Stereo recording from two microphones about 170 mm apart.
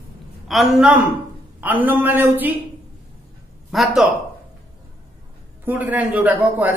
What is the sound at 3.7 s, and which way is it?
Speech, centre (ahead or behind).